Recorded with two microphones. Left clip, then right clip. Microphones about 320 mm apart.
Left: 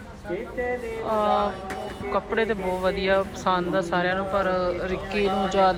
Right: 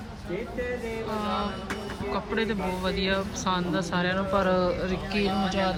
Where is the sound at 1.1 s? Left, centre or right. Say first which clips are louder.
Left 10 dB; centre.